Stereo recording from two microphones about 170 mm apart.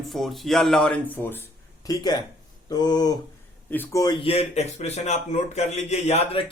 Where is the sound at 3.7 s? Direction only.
10° left (ahead or behind).